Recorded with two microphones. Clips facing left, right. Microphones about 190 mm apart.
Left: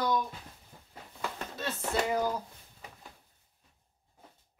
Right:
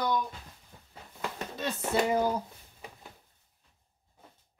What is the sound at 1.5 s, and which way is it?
Speech, 20° right (ahead or behind).